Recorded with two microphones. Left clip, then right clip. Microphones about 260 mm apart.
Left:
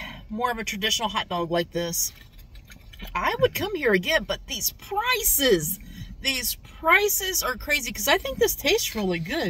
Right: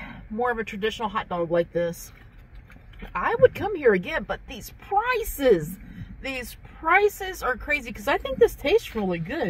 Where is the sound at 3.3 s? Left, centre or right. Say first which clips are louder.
Right 4 dB; left.